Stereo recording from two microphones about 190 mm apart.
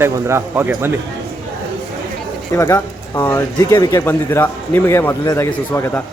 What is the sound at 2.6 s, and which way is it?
A man's voice, 15° left (ahead or behind).